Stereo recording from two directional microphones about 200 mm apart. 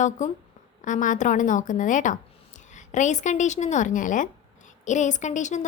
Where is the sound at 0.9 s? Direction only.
40° left (ahead or behind).